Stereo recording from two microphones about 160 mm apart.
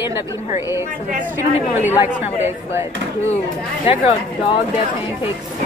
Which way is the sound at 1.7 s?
15° right (ahead or behind).